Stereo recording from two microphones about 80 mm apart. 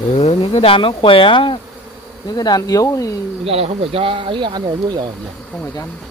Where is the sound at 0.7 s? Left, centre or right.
Left.